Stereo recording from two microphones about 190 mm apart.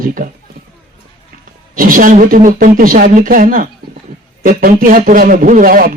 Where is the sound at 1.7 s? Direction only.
45° right (ahead or behind).